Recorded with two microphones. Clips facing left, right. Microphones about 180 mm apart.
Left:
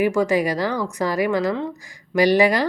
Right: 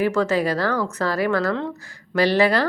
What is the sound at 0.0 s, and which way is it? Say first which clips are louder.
Speech: left 1 dB; 15° left (ahead or behind).